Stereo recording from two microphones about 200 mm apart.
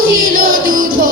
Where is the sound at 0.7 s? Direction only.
45° right (ahead or behind).